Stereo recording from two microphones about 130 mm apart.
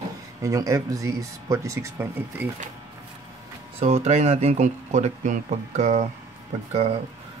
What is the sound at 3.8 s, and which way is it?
Speech, 55° right (ahead or behind).